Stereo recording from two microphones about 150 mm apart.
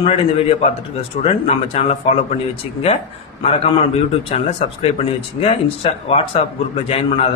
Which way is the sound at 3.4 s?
40° left (ahead or behind).